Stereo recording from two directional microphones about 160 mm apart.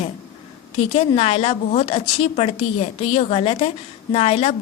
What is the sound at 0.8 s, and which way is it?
A woman's voice, 40° left (ahead or behind).